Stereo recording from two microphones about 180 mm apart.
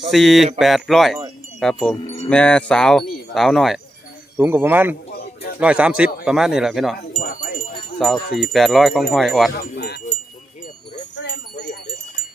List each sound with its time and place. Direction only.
0.1 s speech: centre (ahead or behind)
2.0 s wind chime: 35° left (ahead or behind)
2.3 s speech: 5° left (ahead or behind)
4.4 s a man's voice: 10° right (ahead or behind)
9.7 s wind chime: 65° left (ahead or behind)